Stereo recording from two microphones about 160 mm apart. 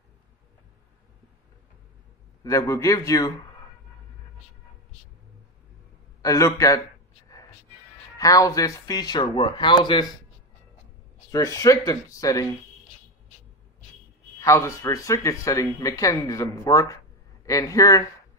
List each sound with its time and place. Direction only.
2.4 s speech: 20° left (ahead or behind)
6.2 s speech: 20° left (ahead or behind)
8.2 s speech: 20° left (ahead or behind)
11.3 s speech: 20° left (ahead or behind)
14.4 s speech: 20° left (ahead or behind)